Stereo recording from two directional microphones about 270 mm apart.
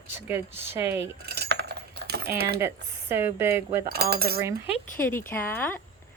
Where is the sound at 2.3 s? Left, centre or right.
Right.